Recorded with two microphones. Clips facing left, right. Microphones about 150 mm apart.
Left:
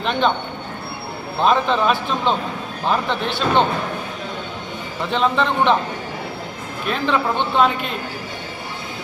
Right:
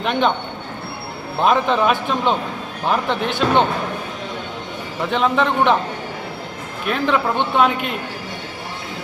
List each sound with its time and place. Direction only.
0.0 s speech: 15° right (ahead or behind)
1.4 s speech: 10° right (ahead or behind)
5.1 s speech: 10° right (ahead or behind)
6.9 s speech: 10° right (ahead or behind)